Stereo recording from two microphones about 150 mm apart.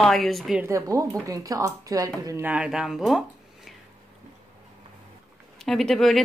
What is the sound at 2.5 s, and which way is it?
Speech, 5° right (ahead or behind).